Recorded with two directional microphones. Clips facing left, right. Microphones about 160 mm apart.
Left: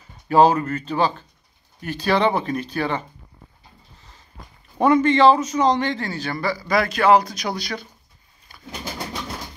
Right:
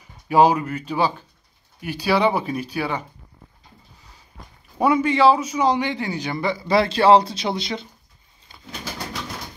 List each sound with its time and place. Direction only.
0.3 s speech: 10° right (ahead or behind)
4.7 s a man's voice: 10° right (ahead or behind)